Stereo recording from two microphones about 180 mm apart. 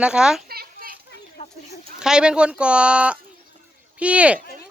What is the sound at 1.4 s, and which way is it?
Chicken, 35° left (ahead or behind).